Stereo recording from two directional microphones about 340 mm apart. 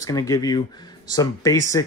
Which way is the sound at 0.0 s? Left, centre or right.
Centre.